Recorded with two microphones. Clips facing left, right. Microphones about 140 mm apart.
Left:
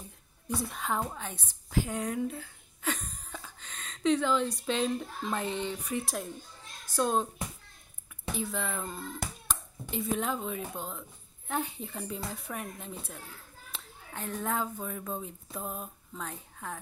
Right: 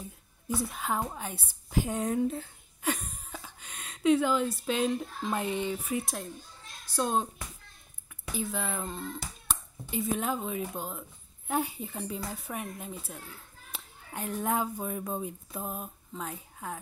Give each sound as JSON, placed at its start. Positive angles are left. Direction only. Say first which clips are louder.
{"t": 0.5, "sound": "a woman's voice", "louder": "right 1 dB", "side_deg": 0}
{"t": 2.8, "sound": "a woman's voice", "louder": "right 2 dB", "side_deg": -10}
{"t": 8.4, "sound": "a woman's voice", "louder": "right 1 dB", "side_deg": 0}
{"t": 9.2, "sound": "hands", "louder": "left 5 dB", "side_deg": 55}
{"t": 9.8, "sound": "a woman's voice", "louder": "right 1 dB", "side_deg": 0}
{"t": 15.5, "sound": "a sound", "louder": "right 1 dB", "side_deg": 0}